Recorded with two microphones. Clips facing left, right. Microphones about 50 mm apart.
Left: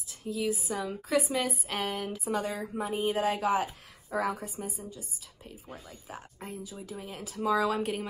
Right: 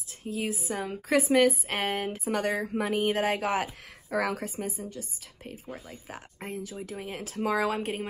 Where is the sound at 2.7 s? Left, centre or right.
Right.